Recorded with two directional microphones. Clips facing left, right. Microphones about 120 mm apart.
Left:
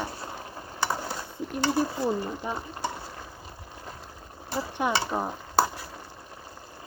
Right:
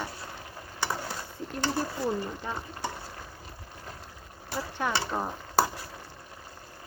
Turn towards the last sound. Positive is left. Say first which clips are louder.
# left 3 dB
turn(degrees=10)  # may be behind; listen again after turning